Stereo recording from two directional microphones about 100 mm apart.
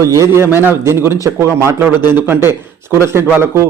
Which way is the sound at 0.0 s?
30° right (ahead or behind).